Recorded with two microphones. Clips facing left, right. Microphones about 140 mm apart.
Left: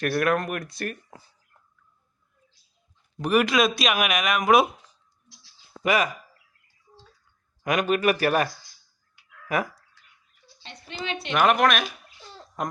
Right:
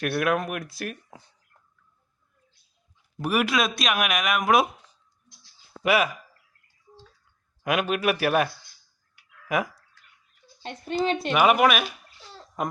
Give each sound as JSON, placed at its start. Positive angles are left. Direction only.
{"t": 0.0, "sound": "speech", "side_deg": -5}
{"t": 3.2, "sound": "speech", "side_deg": -5}
{"t": 7.6, "sound": "speech", "side_deg": -5}
{"t": 10.4, "sound": "a sound", "side_deg": -50}
{"t": 11.0, "sound": "a woman's voice", "side_deg": -40}
{"t": 11.3, "sound": "a sound", "side_deg": -10}